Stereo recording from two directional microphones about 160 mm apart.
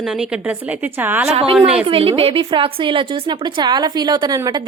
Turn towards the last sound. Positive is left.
turn(degrees=-25)  # may be behind; listen again after turning